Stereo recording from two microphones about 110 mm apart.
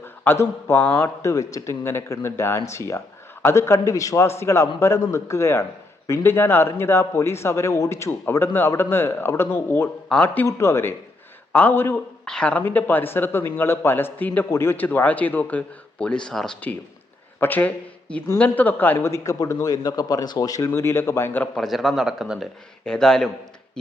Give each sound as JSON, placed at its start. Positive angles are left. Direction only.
{"t": 0.0, "sound": "a man's voice", "side_deg": 20}
{"t": 10.4, "sound": "a man's voice", "side_deg": 25}
{"t": 12.2, "sound": "speech", "side_deg": 10}
{"t": 17.4, "sound": "a man's voice", "side_deg": 15}
{"t": 21.5, "sound": "speech", "side_deg": 0}